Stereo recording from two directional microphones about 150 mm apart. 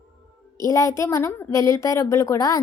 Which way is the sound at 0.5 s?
20° left (ahead or behind).